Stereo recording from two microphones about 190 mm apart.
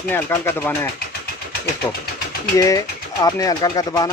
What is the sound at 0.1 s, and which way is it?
Speech, 10° left (ahead or behind).